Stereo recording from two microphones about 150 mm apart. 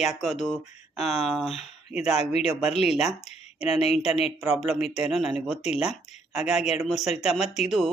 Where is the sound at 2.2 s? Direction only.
45° left (ahead or behind).